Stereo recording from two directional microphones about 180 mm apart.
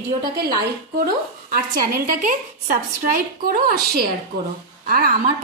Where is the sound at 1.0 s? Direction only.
55° right (ahead or behind).